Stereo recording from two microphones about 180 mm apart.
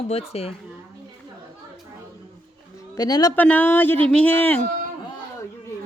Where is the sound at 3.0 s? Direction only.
20° left (ahead or behind).